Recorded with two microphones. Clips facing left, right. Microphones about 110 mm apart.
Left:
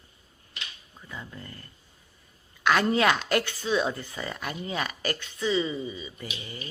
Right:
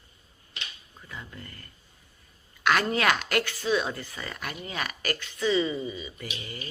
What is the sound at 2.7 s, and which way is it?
A woman's voice, 20° left (ahead or behind).